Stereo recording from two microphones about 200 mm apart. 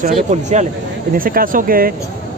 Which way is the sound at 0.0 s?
35° right (ahead or behind).